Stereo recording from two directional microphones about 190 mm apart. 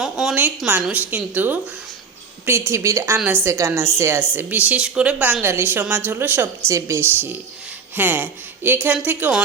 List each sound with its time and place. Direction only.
0.0 s a woman's voice: centre (ahead or behind)